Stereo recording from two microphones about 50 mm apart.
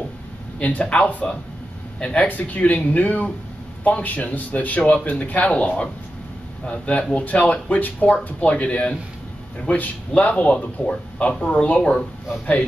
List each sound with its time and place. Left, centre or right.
0.6 s speech: left